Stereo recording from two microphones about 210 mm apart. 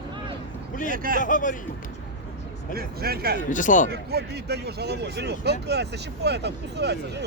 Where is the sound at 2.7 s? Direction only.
45° right (ahead or behind).